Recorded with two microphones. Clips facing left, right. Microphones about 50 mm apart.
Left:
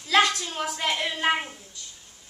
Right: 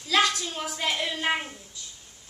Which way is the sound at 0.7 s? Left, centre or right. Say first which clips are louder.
Right 1 dB; centre.